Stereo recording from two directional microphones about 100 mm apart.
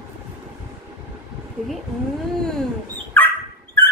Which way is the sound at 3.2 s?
20° left (ahead or behind).